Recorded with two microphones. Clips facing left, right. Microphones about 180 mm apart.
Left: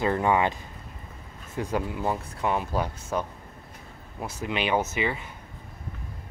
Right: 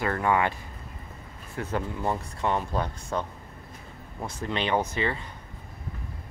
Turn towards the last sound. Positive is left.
turn(degrees=10)  # may be behind; listen again after turning